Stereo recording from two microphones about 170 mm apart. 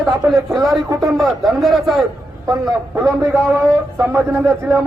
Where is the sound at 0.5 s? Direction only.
Centre (ahead or behind).